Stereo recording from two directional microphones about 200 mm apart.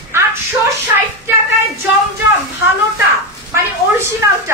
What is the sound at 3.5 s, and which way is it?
A woman's voice, 15° right (ahead or behind).